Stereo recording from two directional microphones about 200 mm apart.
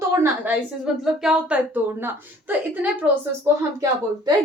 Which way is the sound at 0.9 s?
Centre (ahead or behind).